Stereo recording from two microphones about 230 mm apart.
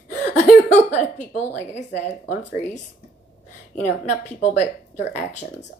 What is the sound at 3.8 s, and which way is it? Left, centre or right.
Speech, left.